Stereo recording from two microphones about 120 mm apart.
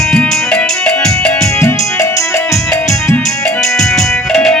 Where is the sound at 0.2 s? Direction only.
10° left (ahead or behind).